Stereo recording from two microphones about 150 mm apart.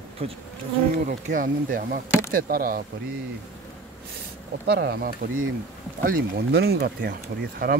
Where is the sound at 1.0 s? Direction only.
60° right (ahead or behind).